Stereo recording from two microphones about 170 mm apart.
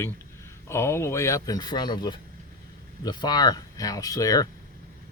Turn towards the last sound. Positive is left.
turn(degrees=20)  # may be behind; listen again after turning